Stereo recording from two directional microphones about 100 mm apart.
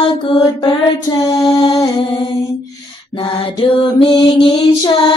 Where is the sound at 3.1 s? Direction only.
60° left (ahead or behind).